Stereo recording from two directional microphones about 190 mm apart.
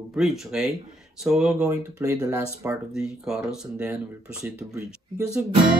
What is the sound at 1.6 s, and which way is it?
Speech, 15° right (ahead or behind).